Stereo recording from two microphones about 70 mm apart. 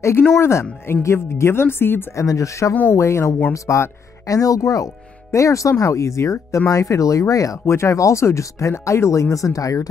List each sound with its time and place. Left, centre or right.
0.0 s speech: left
2.1 s speech: left